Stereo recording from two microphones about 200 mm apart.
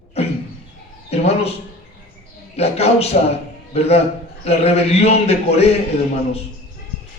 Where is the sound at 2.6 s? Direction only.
30° left (ahead or behind).